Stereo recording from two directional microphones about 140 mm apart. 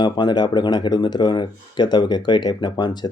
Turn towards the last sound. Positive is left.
turn(degrees=30)  # may be behind; listen again after turning